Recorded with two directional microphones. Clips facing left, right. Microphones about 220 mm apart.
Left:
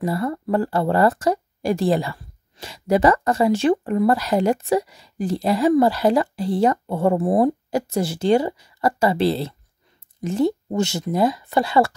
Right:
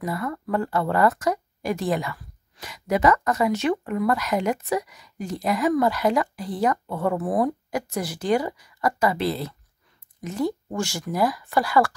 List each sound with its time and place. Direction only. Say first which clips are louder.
0.0 s speech: left 5 dB; 30° left (ahead or behind)